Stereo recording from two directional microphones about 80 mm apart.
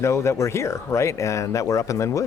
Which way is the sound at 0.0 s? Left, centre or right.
Left.